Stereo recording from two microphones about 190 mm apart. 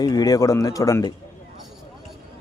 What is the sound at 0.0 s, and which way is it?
Speech, 20° left (ahead or behind).